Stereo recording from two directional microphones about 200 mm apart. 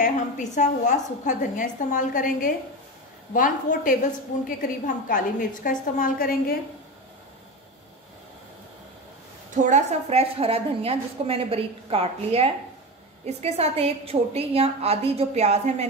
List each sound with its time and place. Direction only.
0.0 s a woman's voice: 40° left (ahead or behind)
9.6 s a woman's voice: 35° right (ahead or behind)